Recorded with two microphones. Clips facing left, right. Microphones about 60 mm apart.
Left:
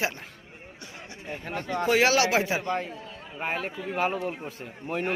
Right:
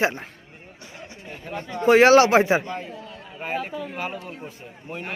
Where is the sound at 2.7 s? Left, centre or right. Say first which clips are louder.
Left 2 dB; left.